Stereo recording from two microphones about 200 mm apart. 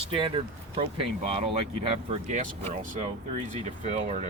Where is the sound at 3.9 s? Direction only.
35° right (ahead or behind).